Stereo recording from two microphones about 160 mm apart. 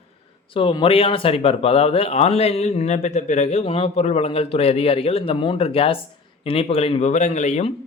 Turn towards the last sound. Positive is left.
turn(degrees=45)  # may be behind; listen again after turning